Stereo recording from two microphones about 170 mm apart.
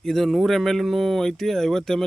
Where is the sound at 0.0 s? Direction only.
Centre (ahead or behind).